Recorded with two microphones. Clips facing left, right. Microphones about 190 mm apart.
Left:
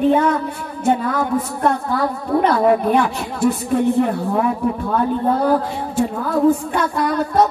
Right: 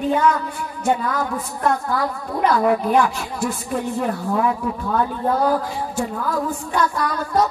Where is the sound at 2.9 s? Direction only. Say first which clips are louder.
Left 1 dB; 60° left (ahead or behind).